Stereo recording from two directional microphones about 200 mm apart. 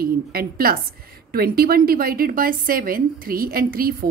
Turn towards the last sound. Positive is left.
turn(degrees=-45)  # may be behind; listen again after turning